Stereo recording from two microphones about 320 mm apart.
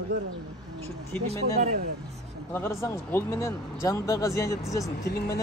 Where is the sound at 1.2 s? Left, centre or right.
Right.